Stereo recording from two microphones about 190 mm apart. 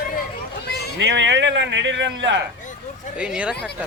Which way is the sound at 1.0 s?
70° right (ahead or behind).